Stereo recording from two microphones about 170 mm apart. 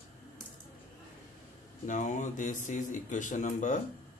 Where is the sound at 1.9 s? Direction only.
50° left (ahead or behind).